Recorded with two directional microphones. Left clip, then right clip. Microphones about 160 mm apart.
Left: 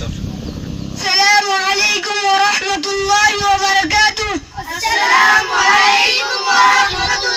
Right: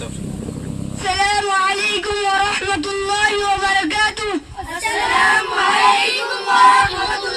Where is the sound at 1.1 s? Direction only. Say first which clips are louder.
Left 5 dB; 55° left (ahead or behind).